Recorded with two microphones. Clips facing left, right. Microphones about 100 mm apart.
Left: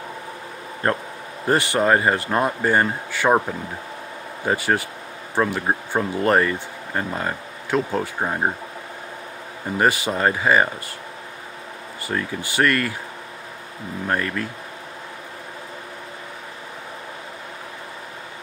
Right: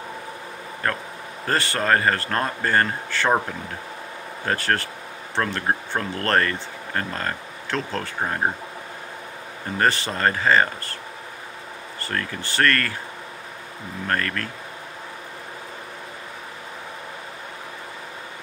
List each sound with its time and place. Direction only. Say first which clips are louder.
0.8 s a man's voice: left 4 dB; 25° left (ahead or behind); by 8.5 s 5° left (ahead or behind)
9.8 s speech: left 2 dB; 10° left (ahead or behind)
12.0 s speech: left 3 dB; 10° left (ahead or behind)
14.0 s speech: left 1 dB; 10° left (ahead or behind)